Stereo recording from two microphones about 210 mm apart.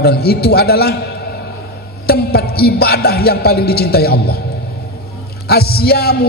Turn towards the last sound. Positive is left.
turn(degrees=50)  # may be behind; listen again after turning